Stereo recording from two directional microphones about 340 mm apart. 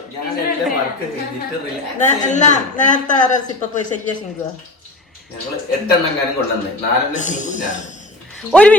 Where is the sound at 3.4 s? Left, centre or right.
Left.